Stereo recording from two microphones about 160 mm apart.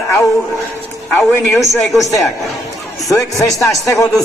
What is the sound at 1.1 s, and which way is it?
Speech, 5° left (ahead or behind).